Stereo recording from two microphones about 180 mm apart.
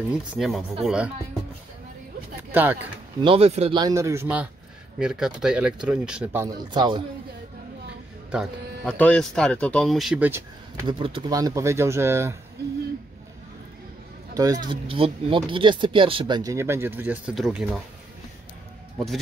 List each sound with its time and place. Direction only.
0.1 s speech: centre (ahead or behind)
2.5 s speech: 10° right (ahead or behind)
3.2 s speech: 30° right (ahead or behind)
3.8 s speech: 15° right (ahead or behind)
6.7 s speech: 25° right (ahead or behind)
8.8 s speech: 5° left (ahead or behind); by 10.9 s 10° right (ahead or behind)
10.9 s speech: 30° right (ahead or behind)
14.3 s speech: 20° right (ahead or behind)
14.7 s speech: 30° right (ahead or behind); by 17.6 s 5° right (ahead or behind)